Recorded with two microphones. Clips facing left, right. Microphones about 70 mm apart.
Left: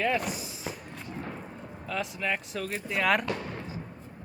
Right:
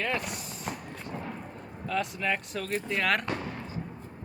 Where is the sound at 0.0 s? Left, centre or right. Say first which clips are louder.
Left 3 dB; centre.